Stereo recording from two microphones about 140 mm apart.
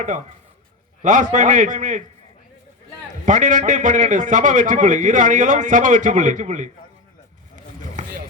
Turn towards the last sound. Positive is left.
turn(degrees=-60)  # may be behind; listen again after turning